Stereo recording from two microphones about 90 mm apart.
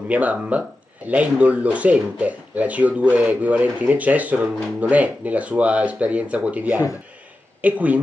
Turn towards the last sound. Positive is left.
turn(degrees=-20)  # may be behind; listen again after turning